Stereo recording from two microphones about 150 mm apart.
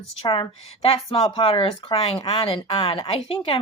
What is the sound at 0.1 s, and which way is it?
Speech, 40° left (ahead or behind).